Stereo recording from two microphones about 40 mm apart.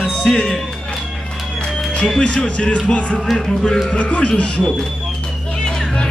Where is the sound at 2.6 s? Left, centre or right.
Left.